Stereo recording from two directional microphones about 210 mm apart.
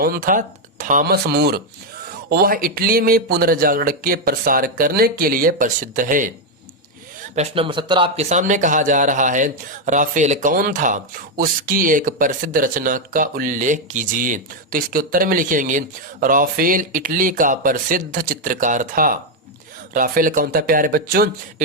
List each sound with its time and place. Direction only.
0.0 s speech: 45° right (ahead or behind)
7.3 s speech: 25° right (ahead or behind); by 21.2 s 45° right (ahead or behind)